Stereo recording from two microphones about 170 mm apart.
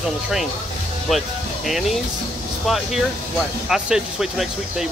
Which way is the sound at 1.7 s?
Centre (ahead or behind).